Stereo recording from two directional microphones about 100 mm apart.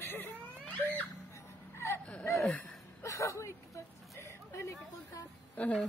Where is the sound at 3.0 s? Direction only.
30° left (ahead or behind).